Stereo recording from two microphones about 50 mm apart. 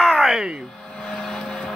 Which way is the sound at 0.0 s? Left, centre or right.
Centre.